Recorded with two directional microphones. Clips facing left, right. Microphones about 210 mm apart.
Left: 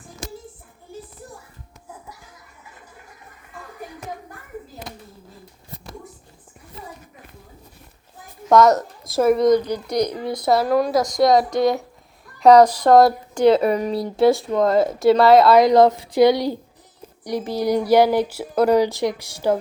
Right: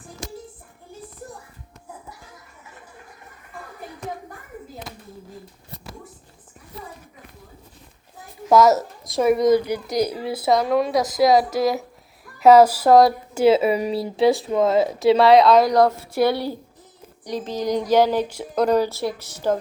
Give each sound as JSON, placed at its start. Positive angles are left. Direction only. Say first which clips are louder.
{"t": 8.4, "sound": "speech", "louder": "left 1 dB", "side_deg": -5}
{"t": 15.5, "sound": "speech", "louder": "left 3 dB", "side_deg": 20}